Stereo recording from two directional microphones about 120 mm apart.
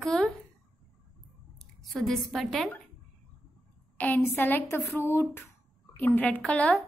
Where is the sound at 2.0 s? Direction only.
Centre (ahead or behind).